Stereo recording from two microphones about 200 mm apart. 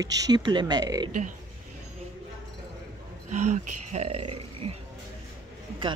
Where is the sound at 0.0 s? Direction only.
20° right (ahead or behind).